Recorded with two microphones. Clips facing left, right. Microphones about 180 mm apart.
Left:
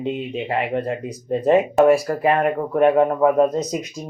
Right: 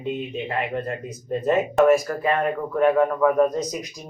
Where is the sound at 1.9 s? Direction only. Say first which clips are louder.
Left 3 dB; 35° left (ahead or behind).